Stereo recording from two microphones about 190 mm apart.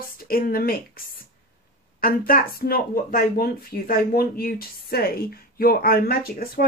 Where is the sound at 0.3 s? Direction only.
50° left (ahead or behind).